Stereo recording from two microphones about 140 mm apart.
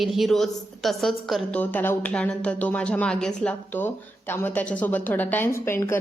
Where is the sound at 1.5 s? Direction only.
15° left (ahead or behind).